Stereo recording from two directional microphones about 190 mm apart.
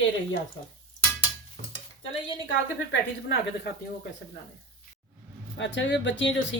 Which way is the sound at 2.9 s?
65° left (ahead or behind).